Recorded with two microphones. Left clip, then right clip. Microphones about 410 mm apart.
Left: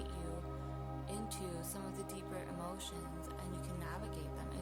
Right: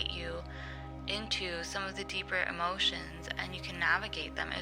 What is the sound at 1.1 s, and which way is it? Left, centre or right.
Speech, left.